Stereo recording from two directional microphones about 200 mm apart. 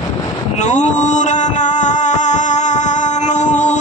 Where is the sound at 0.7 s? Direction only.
35° left (ahead or behind).